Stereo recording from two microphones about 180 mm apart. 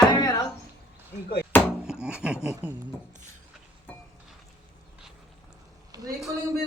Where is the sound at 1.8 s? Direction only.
5° right (ahead or behind).